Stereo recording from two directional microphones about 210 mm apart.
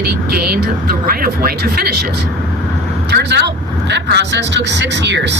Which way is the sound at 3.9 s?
55° right (ahead or behind).